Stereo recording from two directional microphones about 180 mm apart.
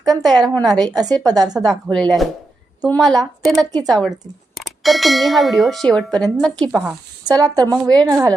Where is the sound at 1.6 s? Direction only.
Centre (ahead or behind).